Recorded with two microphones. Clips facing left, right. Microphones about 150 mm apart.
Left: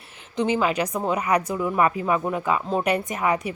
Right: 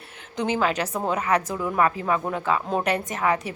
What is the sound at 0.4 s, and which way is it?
A woman's voice, 5° left (ahead or behind).